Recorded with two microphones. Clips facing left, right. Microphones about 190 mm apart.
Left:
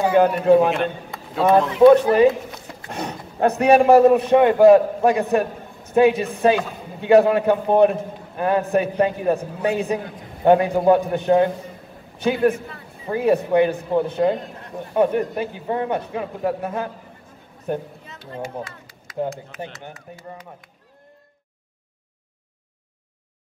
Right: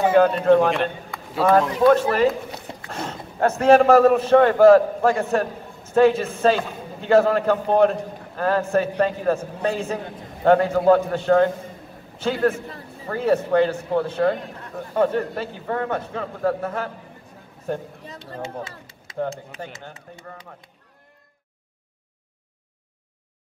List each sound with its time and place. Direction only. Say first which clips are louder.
0.5 s a man's voice: left 1 dB; 5° left (ahead or behind)
1.8 s a man's voice: left 5 dB; 20° left (ahead or behind)
18.0 s a sound: left 1 dB; 35° right (ahead or behind)
19.6 s a man's voice: left 5 dB; 20° left (ahead or behind)